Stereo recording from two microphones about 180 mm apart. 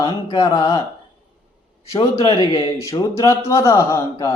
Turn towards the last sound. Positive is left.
turn(degrees=15)  # may be behind; listen again after turning